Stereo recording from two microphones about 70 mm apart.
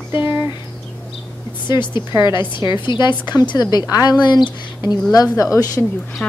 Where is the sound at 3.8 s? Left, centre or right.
Left.